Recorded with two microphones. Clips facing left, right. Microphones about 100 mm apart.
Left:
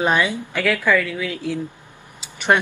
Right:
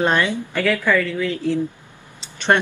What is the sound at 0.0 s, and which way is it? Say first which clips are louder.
Speech: even; 10° left (ahead or behind).